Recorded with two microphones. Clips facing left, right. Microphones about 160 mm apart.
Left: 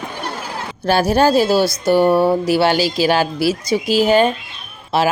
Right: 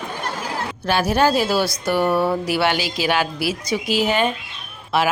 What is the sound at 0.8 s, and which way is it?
Speech, 35° left (ahead or behind).